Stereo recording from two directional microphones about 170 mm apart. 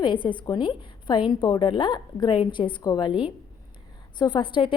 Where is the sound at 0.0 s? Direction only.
30° left (ahead or behind).